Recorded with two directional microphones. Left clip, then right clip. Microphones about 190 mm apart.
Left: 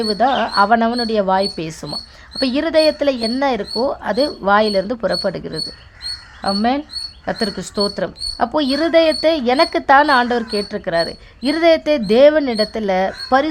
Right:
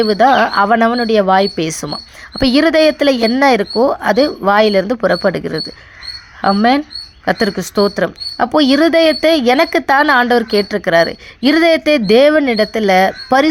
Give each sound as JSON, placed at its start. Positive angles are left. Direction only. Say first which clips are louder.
{"t": 0.0, "sound": "speech", "louder": "right 6 dB", "side_deg": -15}